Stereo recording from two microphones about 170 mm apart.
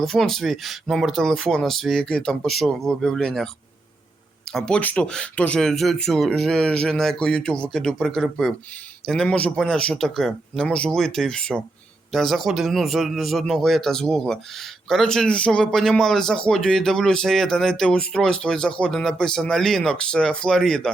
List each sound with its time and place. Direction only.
0.0 s a man's voice: centre (ahead or behind)
4.5 s a man's voice: 5° left (ahead or behind)